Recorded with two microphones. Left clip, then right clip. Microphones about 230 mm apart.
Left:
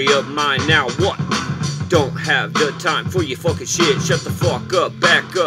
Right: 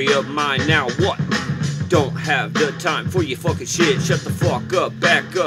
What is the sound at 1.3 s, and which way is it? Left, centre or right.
Music, left.